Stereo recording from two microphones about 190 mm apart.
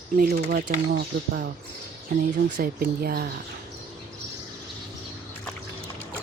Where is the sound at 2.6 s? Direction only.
50° right (ahead or behind).